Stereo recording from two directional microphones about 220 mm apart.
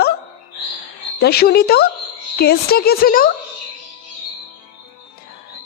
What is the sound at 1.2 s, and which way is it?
Speech, 45° left (ahead or behind).